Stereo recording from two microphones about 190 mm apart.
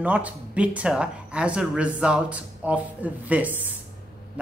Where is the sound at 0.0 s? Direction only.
5° right (ahead or behind).